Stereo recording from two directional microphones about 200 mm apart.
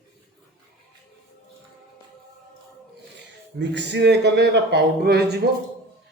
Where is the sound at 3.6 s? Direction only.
60° right (ahead or behind).